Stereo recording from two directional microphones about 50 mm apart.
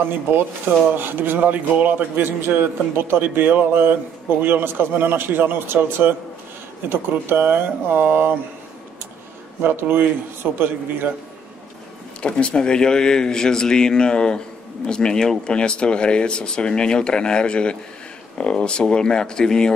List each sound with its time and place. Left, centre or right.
0.0 s a man's voice: right
9.6 s a man's voice: right
12.2 s speech: left